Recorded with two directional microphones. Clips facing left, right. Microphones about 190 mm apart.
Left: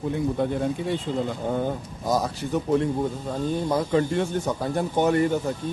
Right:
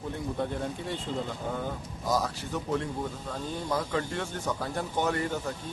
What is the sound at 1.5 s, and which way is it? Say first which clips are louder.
A man's voice: left 7 dB; 25° left (ahead or behind).